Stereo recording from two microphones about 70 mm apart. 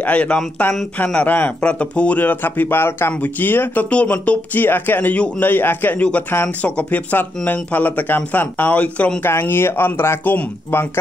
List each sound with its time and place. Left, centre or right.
0.0 s speech: centre
9.2 s speech: left